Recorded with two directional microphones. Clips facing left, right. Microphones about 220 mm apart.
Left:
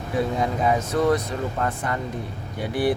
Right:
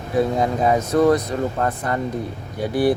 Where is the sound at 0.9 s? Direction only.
40° right (ahead or behind).